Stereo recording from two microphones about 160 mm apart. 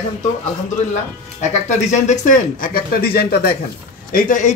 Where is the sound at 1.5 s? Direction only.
45° left (ahead or behind); by 3.5 s 75° left (ahead or behind).